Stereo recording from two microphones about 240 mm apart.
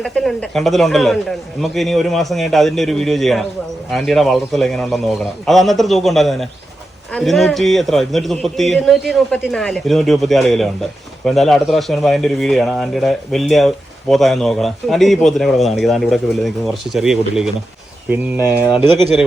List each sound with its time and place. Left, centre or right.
0.0 s a man's voice: centre
18.6 s speech: centre